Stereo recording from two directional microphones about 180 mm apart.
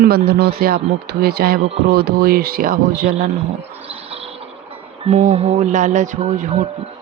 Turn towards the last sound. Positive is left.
turn(degrees=-45)  # may be behind; listen again after turning